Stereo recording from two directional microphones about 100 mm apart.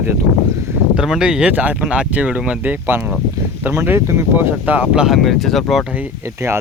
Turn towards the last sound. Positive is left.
turn(degrees=-25)  # may be behind; listen again after turning